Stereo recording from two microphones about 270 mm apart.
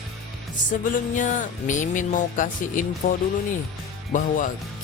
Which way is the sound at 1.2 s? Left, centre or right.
Left.